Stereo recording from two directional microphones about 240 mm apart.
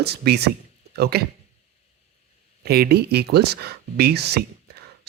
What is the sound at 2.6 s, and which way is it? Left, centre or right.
Speech, right.